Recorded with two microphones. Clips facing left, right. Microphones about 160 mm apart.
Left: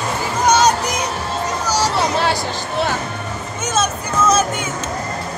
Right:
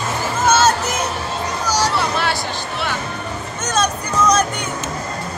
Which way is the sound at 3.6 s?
5° left (ahead or behind).